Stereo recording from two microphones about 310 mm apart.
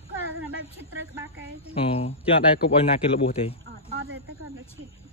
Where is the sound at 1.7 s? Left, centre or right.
Centre.